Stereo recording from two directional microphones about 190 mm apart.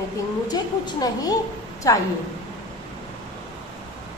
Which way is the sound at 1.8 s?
15° left (ahead or behind).